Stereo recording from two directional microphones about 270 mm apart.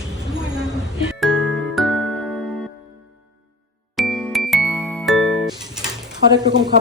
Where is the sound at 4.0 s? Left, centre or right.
Centre.